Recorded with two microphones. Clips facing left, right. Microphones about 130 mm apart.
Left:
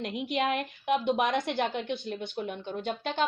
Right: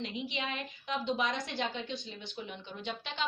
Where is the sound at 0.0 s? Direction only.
55° left (ahead or behind).